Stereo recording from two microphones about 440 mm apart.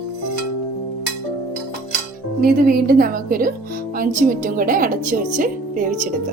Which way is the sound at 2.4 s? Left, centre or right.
Centre.